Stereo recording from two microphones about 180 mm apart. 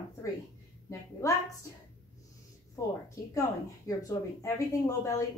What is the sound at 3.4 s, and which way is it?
A woman's voice, 20° left (ahead or behind).